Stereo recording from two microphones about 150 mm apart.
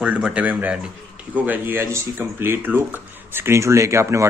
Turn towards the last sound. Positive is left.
turn(degrees=-20)  # may be behind; listen again after turning